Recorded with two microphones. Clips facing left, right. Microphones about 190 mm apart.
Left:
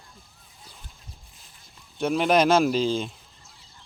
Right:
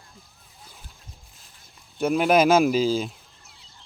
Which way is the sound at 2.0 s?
5° right (ahead or behind).